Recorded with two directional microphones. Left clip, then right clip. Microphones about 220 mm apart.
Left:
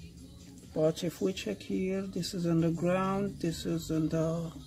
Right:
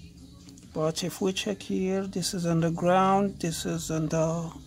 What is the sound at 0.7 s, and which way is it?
Speech, 30° right (ahead or behind).